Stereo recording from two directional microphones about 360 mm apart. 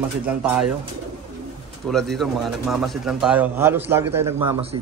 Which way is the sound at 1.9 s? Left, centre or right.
Centre.